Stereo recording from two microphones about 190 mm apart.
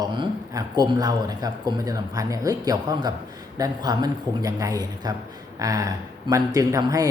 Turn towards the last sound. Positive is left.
turn(degrees=-15)  # may be behind; listen again after turning